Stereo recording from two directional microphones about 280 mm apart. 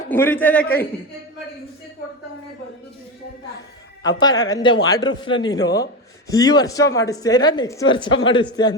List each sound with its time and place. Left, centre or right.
0.1 s speech: centre
4.2 s speech: centre